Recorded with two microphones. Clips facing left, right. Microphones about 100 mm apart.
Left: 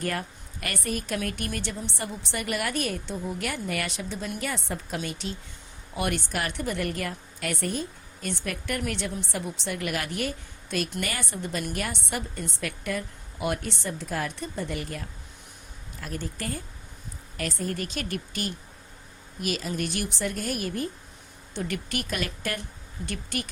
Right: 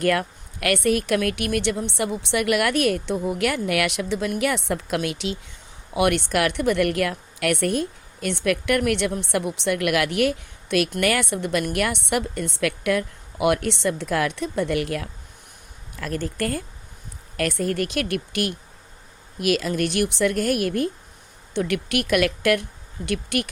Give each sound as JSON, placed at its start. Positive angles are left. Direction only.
{"t": 0.0, "sound": "a woman's voice", "side_deg": -75}